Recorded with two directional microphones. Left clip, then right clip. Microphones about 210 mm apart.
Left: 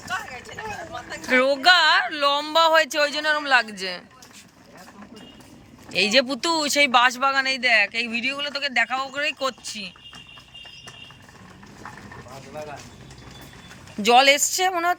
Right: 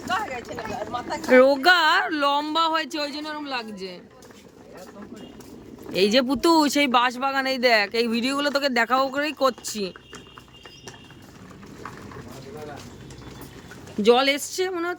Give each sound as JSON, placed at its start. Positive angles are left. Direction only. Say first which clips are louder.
{"t": 1.3, "sound": "a woman's voice", "louder": "right 1 dB", "side_deg": -20}
{"t": 5.9, "sound": "speech", "louder": "left 1 dB", "side_deg": -15}
{"t": 14.0, "sound": "a woman's voice", "louder": "left 3 dB", "side_deg": -10}